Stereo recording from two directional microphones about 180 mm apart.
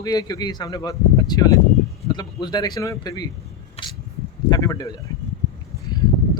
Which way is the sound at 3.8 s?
35° left (ahead or behind).